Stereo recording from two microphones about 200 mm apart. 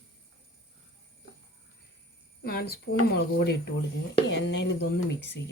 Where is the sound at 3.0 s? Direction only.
55° left (ahead or behind).